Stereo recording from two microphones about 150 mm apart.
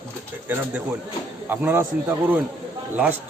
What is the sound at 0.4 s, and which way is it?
Speech, 10° right (ahead or behind).